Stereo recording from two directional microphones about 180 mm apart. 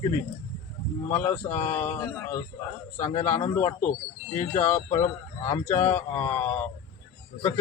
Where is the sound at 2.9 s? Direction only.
40° left (ahead or behind).